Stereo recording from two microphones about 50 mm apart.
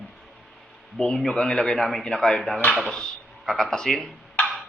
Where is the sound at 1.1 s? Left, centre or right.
Centre.